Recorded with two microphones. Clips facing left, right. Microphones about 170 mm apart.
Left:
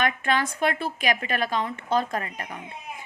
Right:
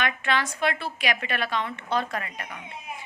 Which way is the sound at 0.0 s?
45° left (ahead or behind).